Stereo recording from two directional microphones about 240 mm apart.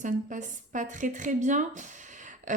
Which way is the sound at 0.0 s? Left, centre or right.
Right.